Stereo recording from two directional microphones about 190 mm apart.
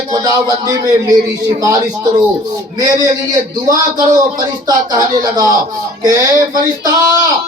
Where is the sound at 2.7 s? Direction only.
20° right (ahead or behind).